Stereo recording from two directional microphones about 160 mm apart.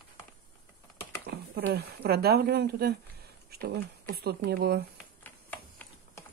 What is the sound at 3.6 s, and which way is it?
Speech, 75° right (ahead or behind).